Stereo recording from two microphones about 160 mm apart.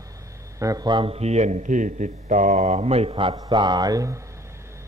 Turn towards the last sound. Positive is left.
turn(degrees=-20)  # may be behind; listen again after turning